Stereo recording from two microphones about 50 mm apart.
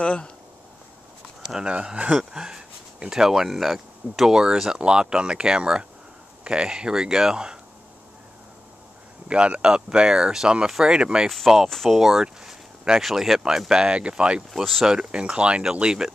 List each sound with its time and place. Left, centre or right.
0.0 s speech: left
1.6 s speech: centre
9.3 s speech: right
11.2 s speech: centre; by 14.4 s right
14.5 s speech: centre
14.9 s speech: centre